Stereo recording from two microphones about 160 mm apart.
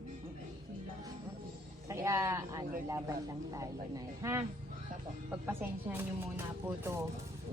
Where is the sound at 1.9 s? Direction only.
20° right (ahead or behind).